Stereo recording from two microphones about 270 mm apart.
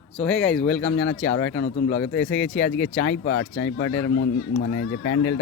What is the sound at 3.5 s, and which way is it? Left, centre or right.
Speech, left.